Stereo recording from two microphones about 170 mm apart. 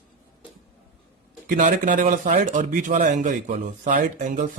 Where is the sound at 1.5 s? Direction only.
45° right (ahead or behind).